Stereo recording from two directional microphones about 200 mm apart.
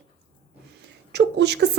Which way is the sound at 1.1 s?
55° right (ahead or behind).